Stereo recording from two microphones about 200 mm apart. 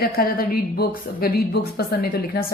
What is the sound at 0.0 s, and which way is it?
Speech, 50° left (ahead or behind).